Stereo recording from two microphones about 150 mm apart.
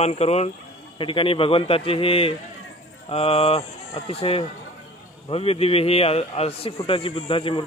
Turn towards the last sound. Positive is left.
turn(degrees=35)  # may be behind; listen again after turning